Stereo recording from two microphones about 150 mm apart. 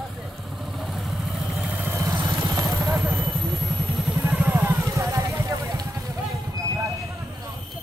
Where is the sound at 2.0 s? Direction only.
30° right (ahead or behind).